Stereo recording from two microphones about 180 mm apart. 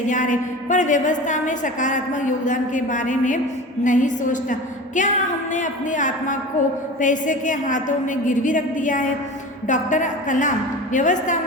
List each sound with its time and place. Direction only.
0.1 s a woman's voice: 45° left (ahead or behind)